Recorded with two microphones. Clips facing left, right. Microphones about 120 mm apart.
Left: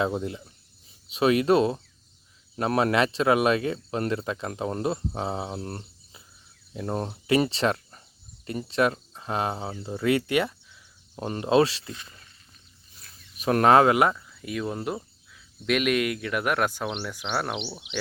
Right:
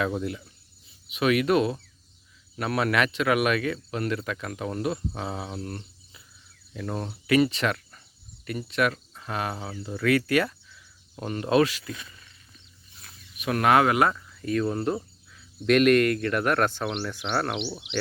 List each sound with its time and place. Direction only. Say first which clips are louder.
0.0 s speech: left 1 dB; 25° left (ahead or behind)
13.3 s speech: left 3 dB; 35° left (ahead or behind); by 17.6 s 5° left (ahead or behind)